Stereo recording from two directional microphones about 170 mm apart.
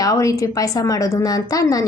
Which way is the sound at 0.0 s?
20° left (ahead or behind).